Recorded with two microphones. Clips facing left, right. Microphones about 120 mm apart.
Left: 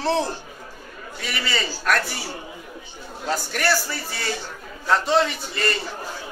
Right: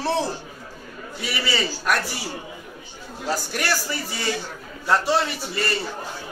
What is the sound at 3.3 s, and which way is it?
A man's voice, 10° right (ahead or behind).